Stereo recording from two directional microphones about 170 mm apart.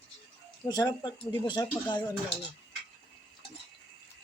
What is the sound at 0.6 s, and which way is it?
Speech, 25° left (ahead or behind).